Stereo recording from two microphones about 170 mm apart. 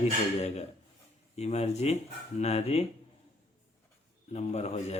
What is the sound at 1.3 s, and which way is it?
Speech, 40° left (ahead or behind).